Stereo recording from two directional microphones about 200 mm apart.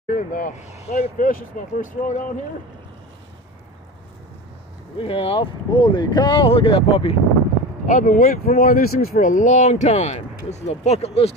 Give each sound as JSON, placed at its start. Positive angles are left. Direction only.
{"t": 0.1, "sound": "speech", "side_deg": 45}
{"t": 4.9, "sound": "speech", "side_deg": 25}
{"t": 7.8, "sound": "speech", "side_deg": 40}